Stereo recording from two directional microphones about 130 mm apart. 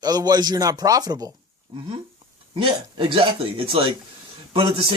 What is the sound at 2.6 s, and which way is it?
Speech, 40° right (ahead or behind).